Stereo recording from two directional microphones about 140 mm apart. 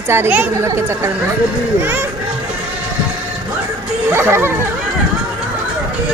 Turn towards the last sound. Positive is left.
turn(degrees=-15)  # may be behind; listen again after turning